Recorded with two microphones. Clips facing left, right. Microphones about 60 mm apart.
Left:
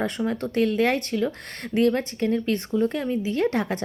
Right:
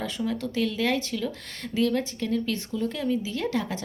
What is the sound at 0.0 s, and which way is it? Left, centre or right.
Speech, left.